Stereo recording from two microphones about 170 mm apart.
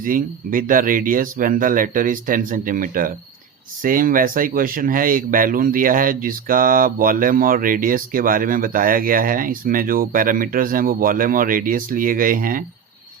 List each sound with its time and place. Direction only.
0.0 s speech: 55° right (ahead or behind)